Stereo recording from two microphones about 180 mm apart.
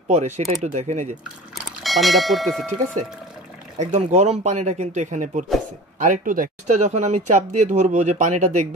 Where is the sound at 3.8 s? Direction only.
40° right (ahead or behind).